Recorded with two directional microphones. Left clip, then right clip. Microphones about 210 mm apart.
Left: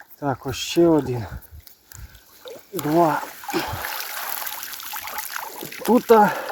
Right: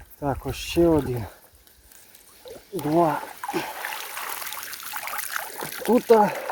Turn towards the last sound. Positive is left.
turn(degrees=15)  # may be behind; listen again after turning